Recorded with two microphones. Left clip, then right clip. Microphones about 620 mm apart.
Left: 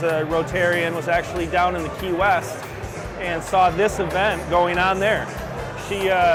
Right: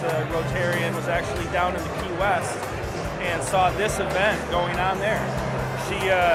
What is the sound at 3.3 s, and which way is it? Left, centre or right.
Speech, left.